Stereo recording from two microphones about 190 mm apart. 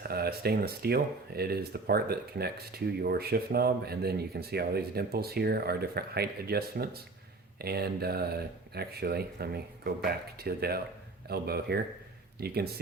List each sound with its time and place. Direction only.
0.1 s speech: 55° right (ahead or behind)